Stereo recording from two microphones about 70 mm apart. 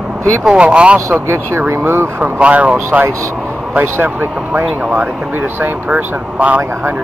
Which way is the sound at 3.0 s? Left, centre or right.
Right.